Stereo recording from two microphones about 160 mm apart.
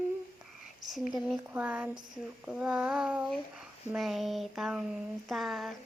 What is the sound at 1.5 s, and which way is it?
Speech, 10° right (ahead or behind).